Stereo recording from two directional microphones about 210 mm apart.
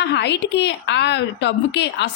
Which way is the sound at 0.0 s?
55° left (ahead or behind).